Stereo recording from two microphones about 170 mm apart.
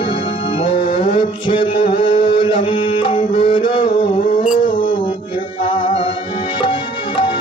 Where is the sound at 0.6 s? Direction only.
30° left (ahead or behind).